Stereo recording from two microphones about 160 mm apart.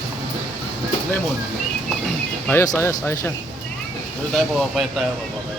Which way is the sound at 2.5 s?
15° left (ahead or behind).